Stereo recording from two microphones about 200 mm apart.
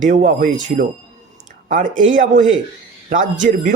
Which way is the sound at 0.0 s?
40° right (ahead or behind).